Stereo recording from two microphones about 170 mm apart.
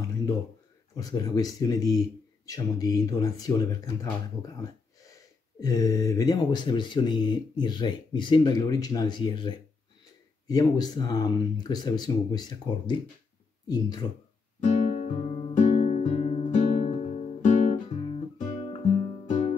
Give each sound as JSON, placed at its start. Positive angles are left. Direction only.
{"t": 0.9, "sound": "speech", "side_deg": 20}
{"t": 5.6, "sound": "speech", "side_deg": 20}
{"t": 14.6, "sound": "music", "side_deg": 35}